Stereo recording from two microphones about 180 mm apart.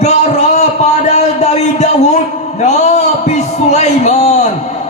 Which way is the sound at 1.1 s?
40° left (ahead or behind).